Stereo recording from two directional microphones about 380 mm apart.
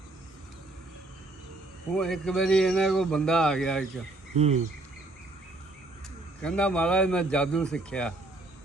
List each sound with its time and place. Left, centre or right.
2.0 s speech: centre
4.4 s speech: centre
6.4 s speech: centre